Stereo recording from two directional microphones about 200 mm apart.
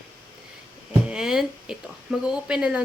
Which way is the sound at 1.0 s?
5° right (ahead or behind).